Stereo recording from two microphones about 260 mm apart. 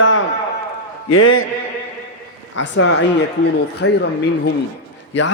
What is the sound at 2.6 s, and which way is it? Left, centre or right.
A man's voice, left.